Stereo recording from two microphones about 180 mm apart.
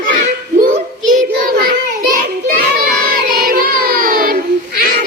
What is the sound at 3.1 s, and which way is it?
Child singing, 55° right (ahead or behind).